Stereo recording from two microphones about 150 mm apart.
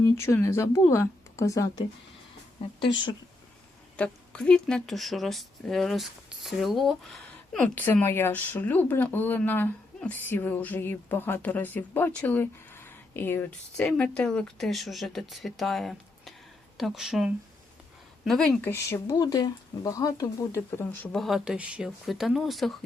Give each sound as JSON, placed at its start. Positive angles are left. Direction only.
{"t": 0.0, "sound": "speech", "side_deg": 20}
{"t": 2.8, "sound": "speech", "side_deg": 30}
{"t": 3.9, "sound": "speech", "side_deg": 10}
{"t": 18.7, "sound": "speech", "side_deg": 20}
{"t": 21.2, "sound": "speech", "side_deg": 0}